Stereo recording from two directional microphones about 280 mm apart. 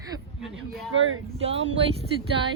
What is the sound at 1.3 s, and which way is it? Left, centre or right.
Speech, right.